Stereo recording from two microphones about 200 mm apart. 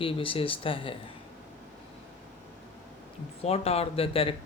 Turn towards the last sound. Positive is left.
turn(degrees=30)  # may be behind; listen again after turning